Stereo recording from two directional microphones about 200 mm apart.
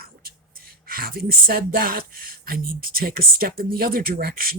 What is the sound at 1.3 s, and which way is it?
Speech, 50° right (ahead or behind).